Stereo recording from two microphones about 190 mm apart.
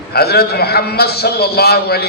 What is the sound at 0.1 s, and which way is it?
A man's voice, 55° left (ahead or behind).